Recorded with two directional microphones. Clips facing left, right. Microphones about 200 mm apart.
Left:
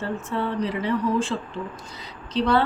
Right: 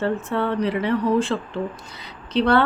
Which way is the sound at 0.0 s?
65° right (ahead or behind).